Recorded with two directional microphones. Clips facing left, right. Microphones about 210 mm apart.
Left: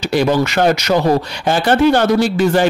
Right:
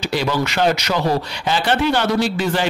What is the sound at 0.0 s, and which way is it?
Speech, 50° left (ahead or behind).